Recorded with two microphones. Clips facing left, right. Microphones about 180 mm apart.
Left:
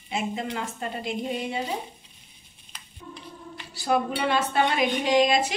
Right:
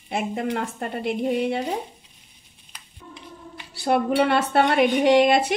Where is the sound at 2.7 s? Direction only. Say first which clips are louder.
Left 1 dB; 15° right (ahead or behind).